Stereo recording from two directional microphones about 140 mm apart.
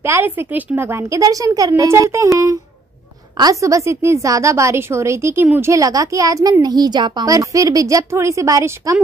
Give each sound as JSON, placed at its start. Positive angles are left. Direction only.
{"t": 0.0, "sound": "a woman's voice", "side_deg": -15}